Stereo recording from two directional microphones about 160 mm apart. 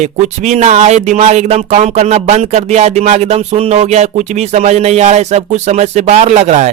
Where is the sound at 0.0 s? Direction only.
50° right (ahead or behind).